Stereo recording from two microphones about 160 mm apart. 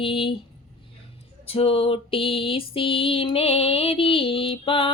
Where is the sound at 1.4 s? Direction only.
35° left (ahead or behind).